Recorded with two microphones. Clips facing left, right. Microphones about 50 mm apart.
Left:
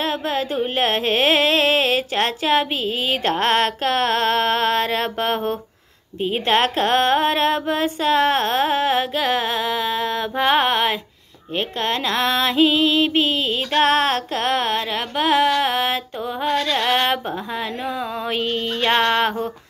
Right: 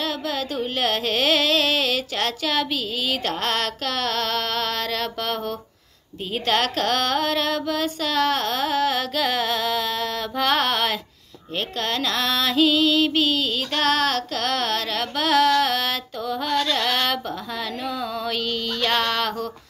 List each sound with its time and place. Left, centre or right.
0.0 s carnatic music: left
0.7 s music: left
6.2 s speech: left